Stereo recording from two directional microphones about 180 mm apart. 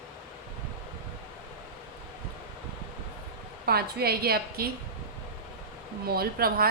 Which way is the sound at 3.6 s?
60° right (ahead or behind).